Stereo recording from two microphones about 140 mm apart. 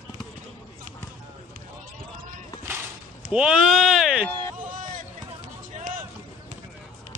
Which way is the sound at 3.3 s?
5° right (ahead or behind).